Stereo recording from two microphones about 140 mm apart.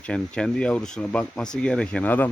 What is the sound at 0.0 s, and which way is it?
Speech, 5° left (ahead or behind).